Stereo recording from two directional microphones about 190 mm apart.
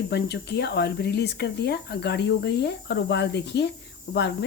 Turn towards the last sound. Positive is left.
turn(degrees=65)  # may be behind; listen again after turning